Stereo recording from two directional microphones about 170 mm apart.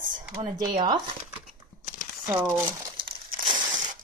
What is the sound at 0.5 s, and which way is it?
Speech, 25° right (ahead or behind).